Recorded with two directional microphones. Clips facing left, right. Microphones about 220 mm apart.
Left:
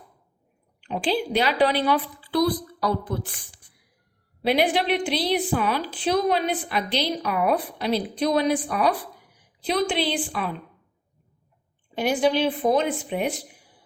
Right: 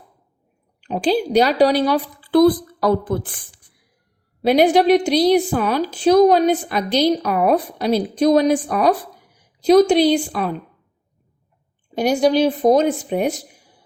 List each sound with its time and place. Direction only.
0.8 s a woman's voice: 40° right (ahead or behind)
4.4 s a woman's voice: 45° right (ahead or behind)
11.9 s a woman's voice: 40° right (ahead or behind)